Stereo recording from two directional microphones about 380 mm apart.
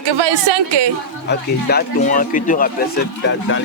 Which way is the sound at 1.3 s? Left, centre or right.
Left.